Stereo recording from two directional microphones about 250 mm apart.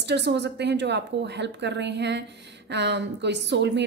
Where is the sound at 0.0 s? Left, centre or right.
Right.